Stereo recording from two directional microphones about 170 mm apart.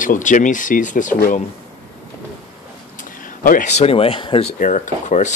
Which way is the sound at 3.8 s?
35° left (ahead or behind).